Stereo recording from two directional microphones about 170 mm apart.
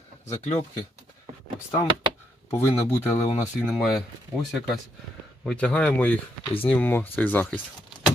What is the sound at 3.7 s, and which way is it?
Speech, centre (ahead or behind).